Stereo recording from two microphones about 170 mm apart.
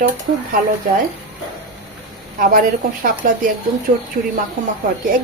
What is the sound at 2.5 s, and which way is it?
Speech, 55° right (ahead or behind).